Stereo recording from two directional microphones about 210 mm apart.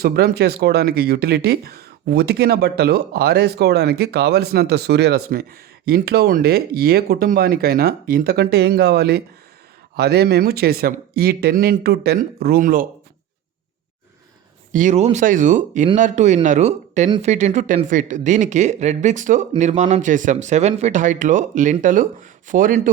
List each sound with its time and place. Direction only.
0.0 s speech: 45° right (ahead or behind)
14.7 s speech: 35° right (ahead or behind)